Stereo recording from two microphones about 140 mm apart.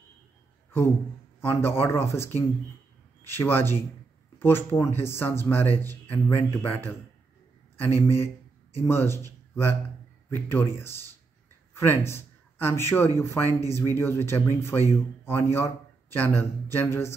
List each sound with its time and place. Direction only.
1.4 s a man's voice: 15° left (ahead or behind)
10.3 s a man's voice: 15° left (ahead or behind)